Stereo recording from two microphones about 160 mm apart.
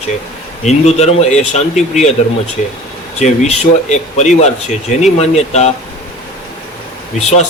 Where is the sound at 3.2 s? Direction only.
45° left (ahead or behind).